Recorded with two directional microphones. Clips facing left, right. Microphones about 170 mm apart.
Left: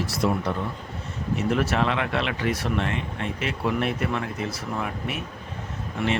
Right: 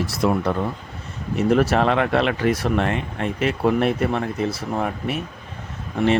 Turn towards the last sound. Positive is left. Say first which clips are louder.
# right 7 dB
turn(degrees=-35)  # may be behind; listen again after turning